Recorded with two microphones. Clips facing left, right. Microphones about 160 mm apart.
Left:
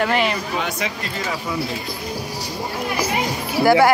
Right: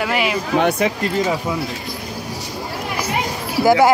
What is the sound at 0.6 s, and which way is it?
Speech, 55° right (ahead or behind).